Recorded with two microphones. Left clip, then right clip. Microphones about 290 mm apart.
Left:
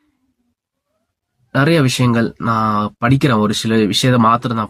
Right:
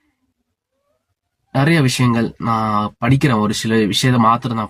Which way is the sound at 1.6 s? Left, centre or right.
Left.